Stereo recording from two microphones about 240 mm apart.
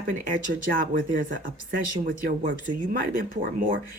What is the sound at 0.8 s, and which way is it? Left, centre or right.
Speech, right.